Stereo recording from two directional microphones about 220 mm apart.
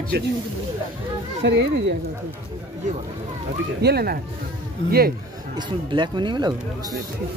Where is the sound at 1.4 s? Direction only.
50° right (ahead or behind).